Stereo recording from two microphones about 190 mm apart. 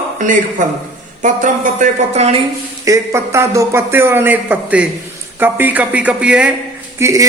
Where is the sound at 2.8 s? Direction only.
15° right (ahead or behind).